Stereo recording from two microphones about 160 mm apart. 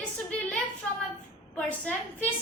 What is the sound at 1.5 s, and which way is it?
Speech, 10° left (ahead or behind).